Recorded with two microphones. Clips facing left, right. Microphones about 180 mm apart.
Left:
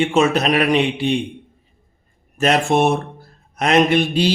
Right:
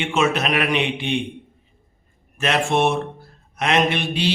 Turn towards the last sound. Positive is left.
turn(degrees=40)  # may be behind; listen again after turning